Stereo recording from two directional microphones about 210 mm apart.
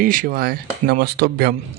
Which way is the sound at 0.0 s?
40° right (ahead or behind).